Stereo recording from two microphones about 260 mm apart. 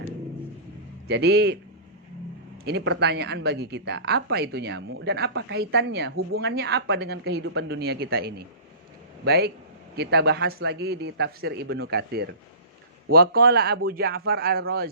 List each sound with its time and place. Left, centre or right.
1.0 s a woman's voice: right
2.6 s a woman's voice: right